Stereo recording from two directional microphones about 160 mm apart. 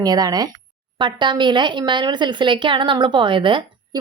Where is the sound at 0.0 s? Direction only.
25° right (ahead or behind).